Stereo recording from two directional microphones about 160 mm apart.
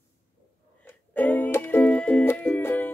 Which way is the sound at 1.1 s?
10° left (ahead or behind).